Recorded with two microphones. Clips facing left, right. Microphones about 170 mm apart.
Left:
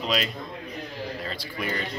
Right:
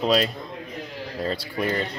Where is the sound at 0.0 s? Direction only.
35° right (ahead or behind).